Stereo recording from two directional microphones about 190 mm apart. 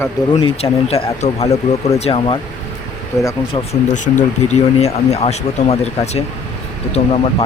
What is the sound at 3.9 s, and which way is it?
Speech, 40° left (ahead or behind).